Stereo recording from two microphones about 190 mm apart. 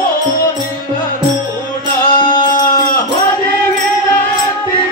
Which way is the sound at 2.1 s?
25° left (ahead or behind).